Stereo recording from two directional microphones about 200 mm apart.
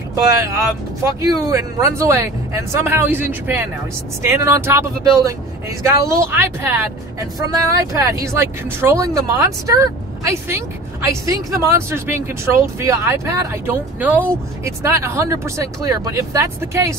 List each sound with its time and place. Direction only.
0.1 s speech: 15° right (ahead or behind)